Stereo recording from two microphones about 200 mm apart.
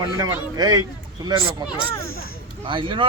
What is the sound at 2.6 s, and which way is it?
Speech, 25° right (ahead or behind).